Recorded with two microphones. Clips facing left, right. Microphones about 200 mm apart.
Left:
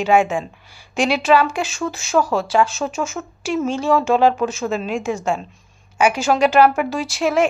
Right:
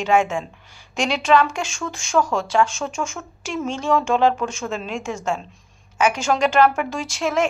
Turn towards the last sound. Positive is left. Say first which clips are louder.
# left 4 dB
turn(degrees=10)  # may be behind; listen again after turning